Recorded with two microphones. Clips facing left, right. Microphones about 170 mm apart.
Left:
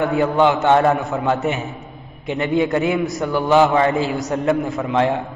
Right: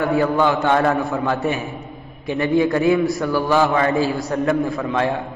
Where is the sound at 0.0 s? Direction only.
20° left (ahead or behind).